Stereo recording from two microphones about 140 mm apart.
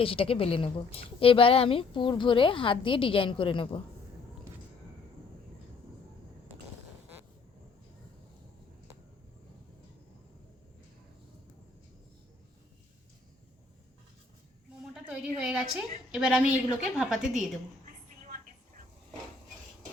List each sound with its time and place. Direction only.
0.0 s a woman's voice: 40° left (ahead or behind)
14.9 s a woman's voice: 10° right (ahead or behind)